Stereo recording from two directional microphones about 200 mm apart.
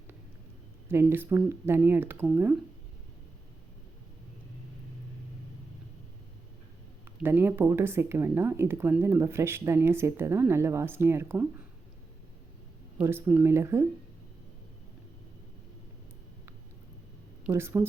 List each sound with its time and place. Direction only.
0.9 s speech: 10° right (ahead or behind)
7.2 s speech: 10° right (ahead or behind)
13.0 s speech: 10° right (ahead or behind)
17.4 s a woman's voice: 10° right (ahead or behind)